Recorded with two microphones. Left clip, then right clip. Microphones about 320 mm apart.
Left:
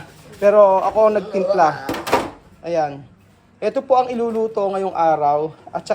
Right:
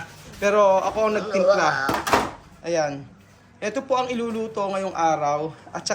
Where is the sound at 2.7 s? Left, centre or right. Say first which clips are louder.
Left 3 dB; centre.